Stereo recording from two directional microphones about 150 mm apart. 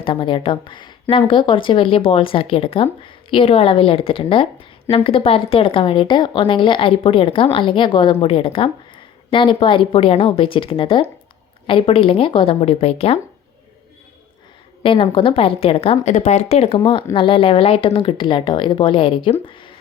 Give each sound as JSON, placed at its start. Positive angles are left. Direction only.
{"t": 0.0, "sound": "speech", "side_deg": 35}
{"t": 14.8, "sound": "speech", "side_deg": 35}
{"t": 16.1, "sound": "speech", "side_deg": 50}